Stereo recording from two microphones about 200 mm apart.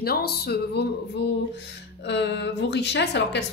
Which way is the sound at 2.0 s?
60° left (ahead or behind).